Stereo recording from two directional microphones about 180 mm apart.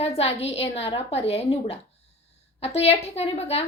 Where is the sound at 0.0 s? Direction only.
35° left (ahead or behind).